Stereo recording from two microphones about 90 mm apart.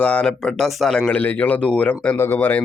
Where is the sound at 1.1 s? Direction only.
20° left (ahead or behind).